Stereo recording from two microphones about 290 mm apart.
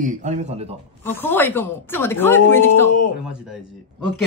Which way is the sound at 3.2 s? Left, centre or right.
Centre.